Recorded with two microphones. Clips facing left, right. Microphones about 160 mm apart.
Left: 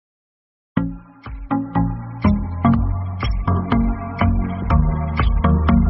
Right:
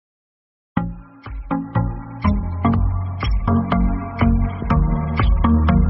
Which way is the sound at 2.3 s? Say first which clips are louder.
Left 2 dB; centre (ahead or behind).